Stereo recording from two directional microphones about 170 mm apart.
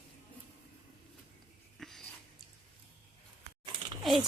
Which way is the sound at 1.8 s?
Centre (ahead or behind).